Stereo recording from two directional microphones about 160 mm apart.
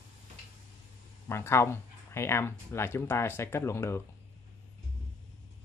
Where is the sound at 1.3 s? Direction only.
15° left (ahead or behind).